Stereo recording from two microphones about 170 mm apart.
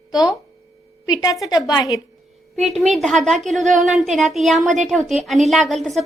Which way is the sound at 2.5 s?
Centre (ahead or behind).